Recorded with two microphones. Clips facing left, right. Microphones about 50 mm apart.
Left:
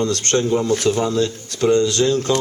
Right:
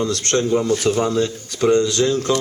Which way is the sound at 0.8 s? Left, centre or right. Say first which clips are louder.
Even; right.